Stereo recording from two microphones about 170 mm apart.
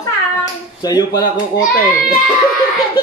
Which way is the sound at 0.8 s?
20° left (ahead or behind).